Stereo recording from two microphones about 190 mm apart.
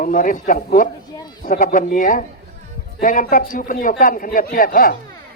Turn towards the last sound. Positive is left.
turn(degrees=50)  # may be behind; listen again after turning